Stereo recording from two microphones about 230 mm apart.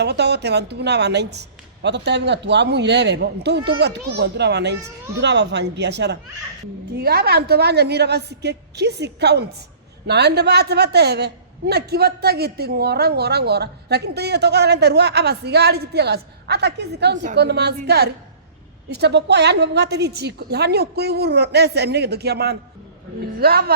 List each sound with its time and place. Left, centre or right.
0.0 s a woman's voice: right